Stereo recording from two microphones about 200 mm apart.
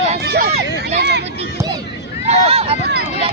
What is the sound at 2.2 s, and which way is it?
Speech, 30° right (ahead or behind).